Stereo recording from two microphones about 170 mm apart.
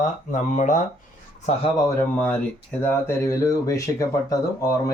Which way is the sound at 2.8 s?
15° left (ahead or behind).